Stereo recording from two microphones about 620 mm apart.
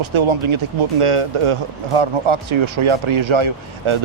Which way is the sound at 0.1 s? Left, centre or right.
Right.